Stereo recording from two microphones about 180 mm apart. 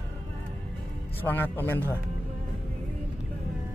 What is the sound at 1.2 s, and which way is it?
Speech, 10° left (ahead or behind).